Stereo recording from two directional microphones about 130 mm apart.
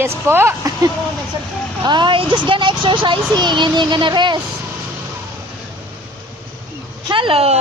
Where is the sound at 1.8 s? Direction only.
35° right (ahead or behind).